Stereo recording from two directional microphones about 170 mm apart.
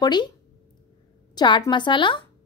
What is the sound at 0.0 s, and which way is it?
Speech, 25° left (ahead or behind).